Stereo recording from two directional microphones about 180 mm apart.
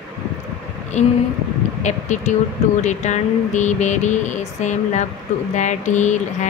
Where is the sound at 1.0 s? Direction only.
40° left (ahead or behind).